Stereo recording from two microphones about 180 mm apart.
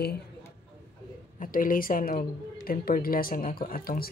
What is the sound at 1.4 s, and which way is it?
Speech, 50° left (ahead or behind).